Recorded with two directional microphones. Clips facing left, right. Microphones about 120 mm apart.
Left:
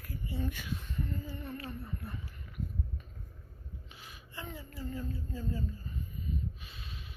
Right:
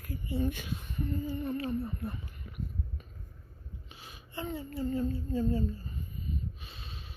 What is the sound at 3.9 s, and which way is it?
Speech, 25° right (ahead or behind).